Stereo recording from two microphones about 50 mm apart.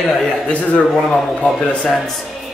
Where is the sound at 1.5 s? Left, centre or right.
Left.